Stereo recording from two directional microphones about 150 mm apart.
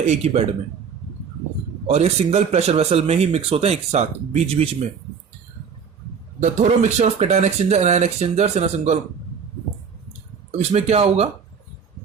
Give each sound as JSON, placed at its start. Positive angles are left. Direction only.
{"t": 0.0, "sound": "speech", "side_deg": -50}
{"t": 1.9, "sound": "speech", "side_deg": -45}
{"t": 6.4, "sound": "speech", "side_deg": -50}
{"t": 10.6, "sound": "speech", "side_deg": -45}